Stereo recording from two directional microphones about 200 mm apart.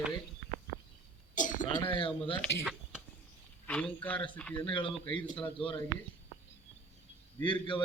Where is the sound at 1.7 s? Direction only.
25° left (ahead or behind).